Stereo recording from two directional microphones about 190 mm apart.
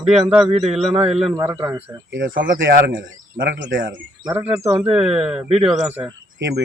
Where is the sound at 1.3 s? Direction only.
20° right (ahead or behind).